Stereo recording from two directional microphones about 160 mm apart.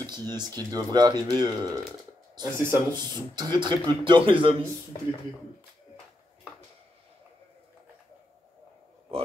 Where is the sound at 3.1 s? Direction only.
25° right (ahead or behind).